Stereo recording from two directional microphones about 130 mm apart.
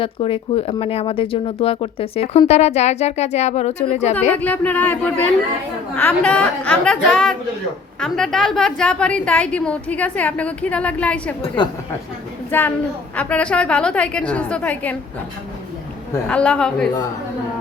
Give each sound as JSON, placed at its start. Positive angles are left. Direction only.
{"t": 0.0, "sound": "speech", "side_deg": 45}
{"t": 4.4, "sound": "a woman's voice", "side_deg": 10}
{"t": 8.0, "sound": "a woman's voice", "side_deg": 5}
{"t": 12.5, "sound": "a woman's voice", "side_deg": 15}
{"t": 16.3, "sound": "a woman's voice", "side_deg": 10}